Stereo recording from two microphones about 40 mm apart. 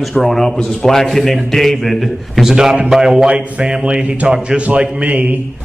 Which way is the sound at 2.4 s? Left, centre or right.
Centre.